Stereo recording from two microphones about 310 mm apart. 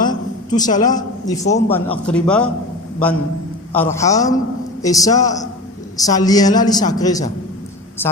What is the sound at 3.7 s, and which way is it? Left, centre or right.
A man's voice, centre.